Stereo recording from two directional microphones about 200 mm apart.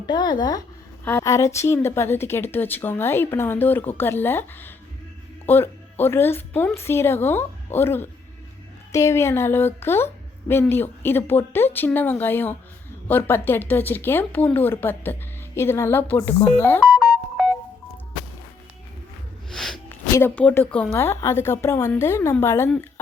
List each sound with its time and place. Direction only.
0.0 s a woman's voice: 20° left (ahead or behind); by 17.5 s centre (ahead or behind)
19.5 s a sound: centre (ahead or behind)
20.1 s speech: 10° left (ahead or behind)